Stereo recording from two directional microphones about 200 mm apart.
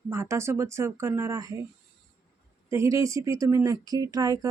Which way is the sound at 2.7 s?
15° right (ahead or behind).